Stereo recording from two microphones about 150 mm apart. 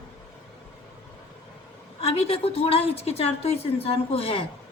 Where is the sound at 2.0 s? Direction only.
40° left (ahead or behind).